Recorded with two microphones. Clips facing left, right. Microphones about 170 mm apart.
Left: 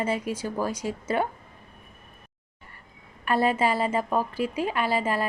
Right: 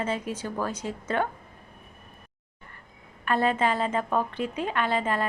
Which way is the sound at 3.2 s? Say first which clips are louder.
Left 1 dB; 10° left (ahead or behind).